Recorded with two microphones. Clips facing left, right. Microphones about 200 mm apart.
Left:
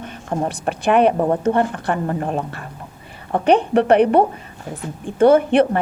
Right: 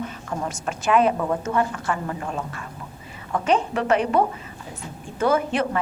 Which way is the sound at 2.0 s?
50° left (ahead or behind).